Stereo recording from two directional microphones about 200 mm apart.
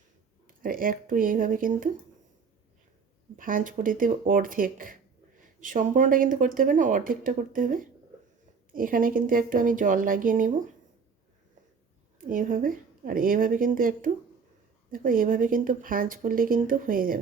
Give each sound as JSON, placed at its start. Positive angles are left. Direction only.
{"t": 0.4, "sound": "speech", "side_deg": -45}
{"t": 3.3, "sound": "speech", "side_deg": -40}
{"t": 12.3, "sound": "speech", "side_deg": -45}